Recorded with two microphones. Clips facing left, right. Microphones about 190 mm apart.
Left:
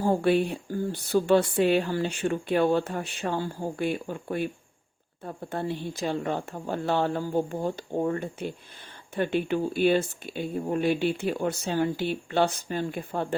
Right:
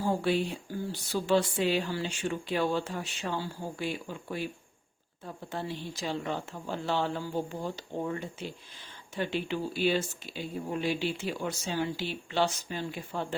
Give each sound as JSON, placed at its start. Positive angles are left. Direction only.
{"t": 0.0, "sound": "speech", "side_deg": 55}